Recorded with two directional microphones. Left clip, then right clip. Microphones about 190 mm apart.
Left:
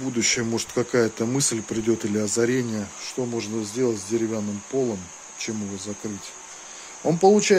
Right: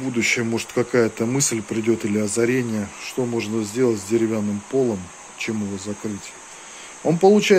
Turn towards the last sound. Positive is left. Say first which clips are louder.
# right 2 dB
turn(degrees=15)  # may be behind; listen again after turning